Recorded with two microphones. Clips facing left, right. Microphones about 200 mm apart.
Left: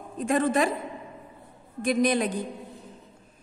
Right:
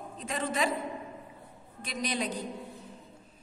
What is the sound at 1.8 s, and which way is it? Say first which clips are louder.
Speech: left 10 dB; 55° left (ahead or behind).